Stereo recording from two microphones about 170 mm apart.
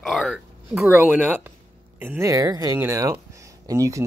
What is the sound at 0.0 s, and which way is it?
Speech, centre (ahead or behind).